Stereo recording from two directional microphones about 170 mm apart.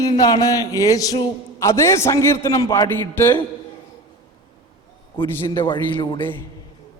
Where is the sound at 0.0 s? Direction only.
25° left (ahead or behind).